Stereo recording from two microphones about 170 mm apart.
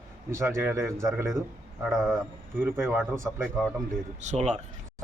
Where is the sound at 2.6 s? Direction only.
15° right (ahead or behind).